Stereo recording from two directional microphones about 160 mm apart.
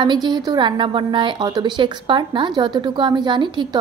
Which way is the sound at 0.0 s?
25° right (ahead or behind).